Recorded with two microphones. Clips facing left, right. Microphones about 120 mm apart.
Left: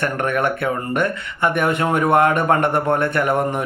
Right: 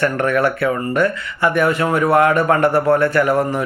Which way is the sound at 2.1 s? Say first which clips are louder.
Right 2 dB; 25° left (ahead or behind).